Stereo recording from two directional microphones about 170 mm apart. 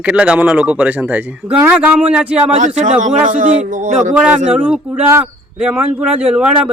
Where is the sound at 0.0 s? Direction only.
5° right (ahead or behind).